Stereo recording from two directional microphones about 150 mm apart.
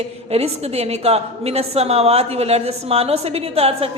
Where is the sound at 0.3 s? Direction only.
45° right (ahead or behind).